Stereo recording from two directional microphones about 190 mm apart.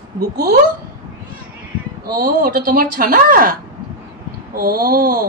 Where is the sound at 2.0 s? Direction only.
50° right (ahead or behind).